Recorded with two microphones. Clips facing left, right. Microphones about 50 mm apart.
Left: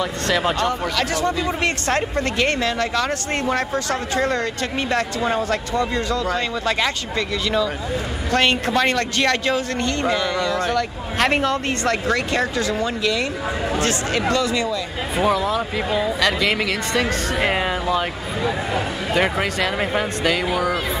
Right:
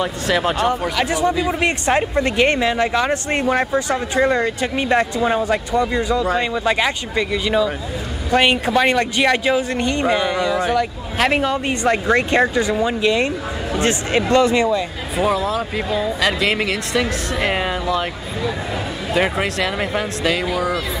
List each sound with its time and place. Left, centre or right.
0.3 s speech: centre; by 14.8 s right
15.1 s speech: centre
17.8 s speech: centre
19.1 s speech: centre